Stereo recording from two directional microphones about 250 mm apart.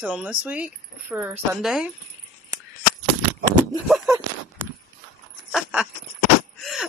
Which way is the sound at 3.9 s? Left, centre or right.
Centre.